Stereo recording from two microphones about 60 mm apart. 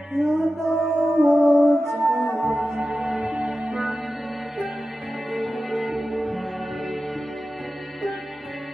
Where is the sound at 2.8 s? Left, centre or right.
Right.